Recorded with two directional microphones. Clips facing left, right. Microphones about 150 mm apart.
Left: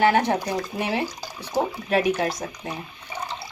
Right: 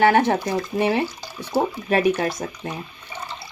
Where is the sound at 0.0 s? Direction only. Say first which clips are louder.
Right 3 dB; 55° right (ahead or behind).